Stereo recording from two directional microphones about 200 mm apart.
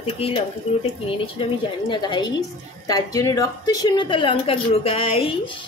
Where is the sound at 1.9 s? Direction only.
20° left (ahead or behind).